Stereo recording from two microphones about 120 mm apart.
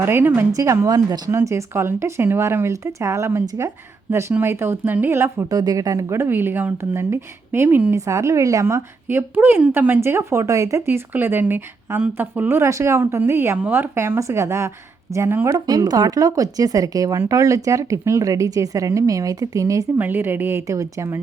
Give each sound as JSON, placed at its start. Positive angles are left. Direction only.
{"t": 0.0, "sound": "speech", "side_deg": -20}
{"t": 5.5, "sound": "speech", "side_deg": -35}
{"t": 15.5, "sound": "speech", "side_deg": -35}
{"t": 20.0, "sound": "speech", "side_deg": -15}